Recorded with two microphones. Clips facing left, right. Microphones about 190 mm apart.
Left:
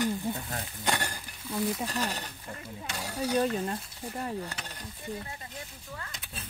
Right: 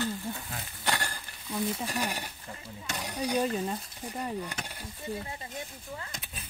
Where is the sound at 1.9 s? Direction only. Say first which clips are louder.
Even; 10° right (ahead or behind).